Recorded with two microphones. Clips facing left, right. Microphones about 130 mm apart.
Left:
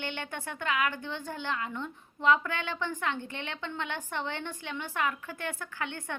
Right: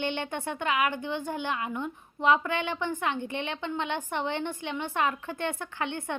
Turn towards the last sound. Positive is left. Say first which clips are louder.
# right 4 dB
turn(degrees=-20)  # may be behind; listen again after turning